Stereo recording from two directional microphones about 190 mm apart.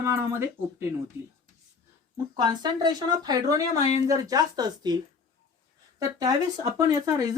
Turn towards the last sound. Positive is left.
turn(degrees=-20)  # may be behind; listen again after turning